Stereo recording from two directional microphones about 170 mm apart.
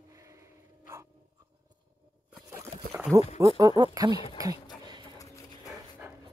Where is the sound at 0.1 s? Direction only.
20° right (ahead or behind).